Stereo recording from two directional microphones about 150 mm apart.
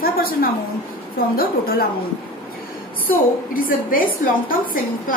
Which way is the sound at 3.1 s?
70° left (ahead or behind).